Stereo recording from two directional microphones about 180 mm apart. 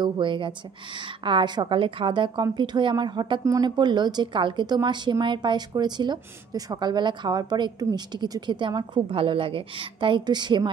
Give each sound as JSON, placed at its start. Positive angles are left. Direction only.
{"t": 0.0, "sound": "a woman's voice", "side_deg": -25}